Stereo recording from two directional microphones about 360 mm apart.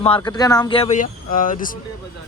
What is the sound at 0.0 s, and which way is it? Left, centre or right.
A man's voice, centre.